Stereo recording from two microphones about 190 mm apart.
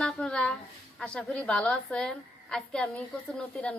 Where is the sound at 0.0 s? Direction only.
5° left (ahead or behind).